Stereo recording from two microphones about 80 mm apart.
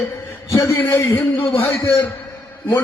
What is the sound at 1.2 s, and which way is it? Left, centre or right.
Speech, left.